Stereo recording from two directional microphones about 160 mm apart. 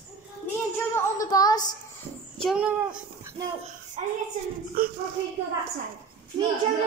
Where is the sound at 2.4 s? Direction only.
5° right (ahead or behind).